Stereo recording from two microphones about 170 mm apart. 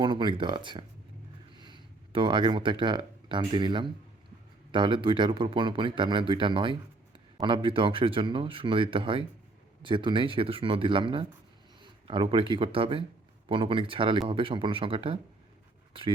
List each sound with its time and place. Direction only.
0.0 s speech: 25° right (ahead or behind)